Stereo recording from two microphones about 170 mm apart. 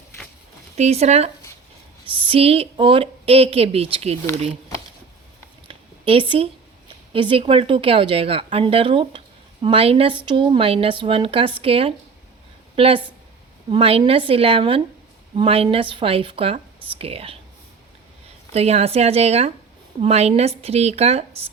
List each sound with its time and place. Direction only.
0.8 s speech: 40° right (ahead or behind)
5.6 s a sound: 30° right (ahead or behind)
7.1 s speech: 30° right (ahead or behind)
18.5 s speech: 40° right (ahead or behind)